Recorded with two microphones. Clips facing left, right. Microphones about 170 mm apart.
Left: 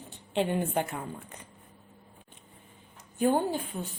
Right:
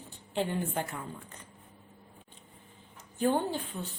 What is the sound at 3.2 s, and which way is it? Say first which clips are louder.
Speech: left 3 dB; 10° left (ahead or behind).